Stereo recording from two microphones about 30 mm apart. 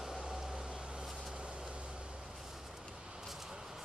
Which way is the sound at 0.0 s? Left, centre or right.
Right.